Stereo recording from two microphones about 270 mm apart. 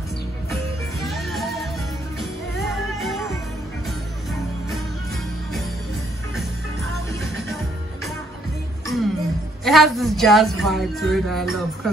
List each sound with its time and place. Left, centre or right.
1.0 s music: centre
6.3 s music: centre
8.8 s music: centre
9.7 s speech: centre